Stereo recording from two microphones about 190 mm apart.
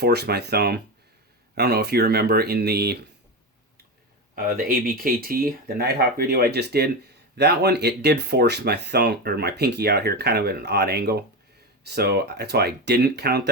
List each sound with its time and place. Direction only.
0.0 s speech: 60° right (ahead or behind)
4.4 s speech: 50° right (ahead or behind)